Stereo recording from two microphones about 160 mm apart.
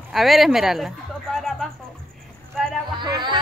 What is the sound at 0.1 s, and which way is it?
Speech, centre (ahead or behind).